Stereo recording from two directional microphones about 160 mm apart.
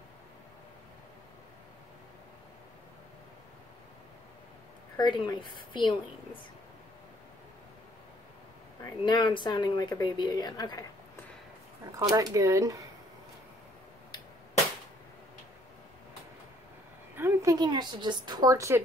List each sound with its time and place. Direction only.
4.9 s speech: 30° left (ahead or behind)
9.0 s speech: 30° left (ahead or behind)
12.0 s speech: 25° right (ahead or behind)
17.1 s a woman's voice: 15° right (ahead or behind)